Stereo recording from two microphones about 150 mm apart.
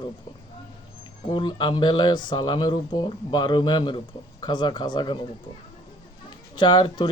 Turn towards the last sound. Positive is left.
turn(degrees=30)  # may be behind; listen again after turning